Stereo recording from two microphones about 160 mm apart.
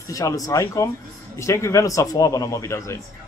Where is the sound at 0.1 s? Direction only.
20° left (ahead or behind).